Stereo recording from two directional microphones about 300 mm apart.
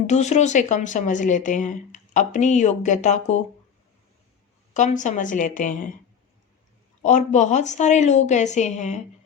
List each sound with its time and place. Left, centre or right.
0.1 s speech: left
4.7 s speech: left
7.0 s speech: left